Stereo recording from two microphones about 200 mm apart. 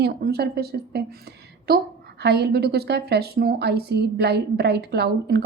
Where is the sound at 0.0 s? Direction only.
50° right (ahead or behind).